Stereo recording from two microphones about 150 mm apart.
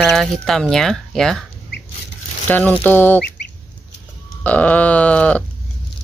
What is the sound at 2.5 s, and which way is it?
Speech, 10° left (ahead or behind).